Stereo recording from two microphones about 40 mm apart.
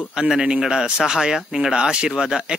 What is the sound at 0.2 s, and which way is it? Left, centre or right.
Speech, right.